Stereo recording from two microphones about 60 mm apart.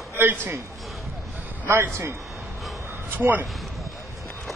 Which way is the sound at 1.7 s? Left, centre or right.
Right.